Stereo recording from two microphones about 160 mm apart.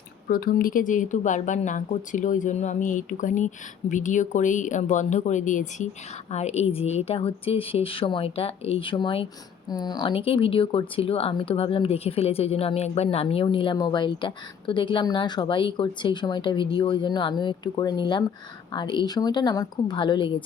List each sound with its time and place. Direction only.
0.3 s a woman's voice: 65° left (ahead or behind); by 20.4 s 30° left (ahead or behind)